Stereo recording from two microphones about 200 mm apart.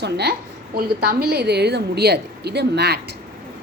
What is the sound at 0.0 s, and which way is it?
A woman's voice, 55° right (ahead or behind).